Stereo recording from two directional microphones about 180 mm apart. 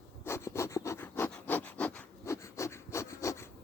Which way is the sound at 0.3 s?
15° left (ahead or behind).